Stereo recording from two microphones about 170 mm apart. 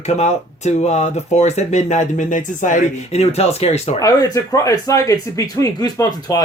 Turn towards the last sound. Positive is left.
turn(degrees=20)  # may be behind; listen again after turning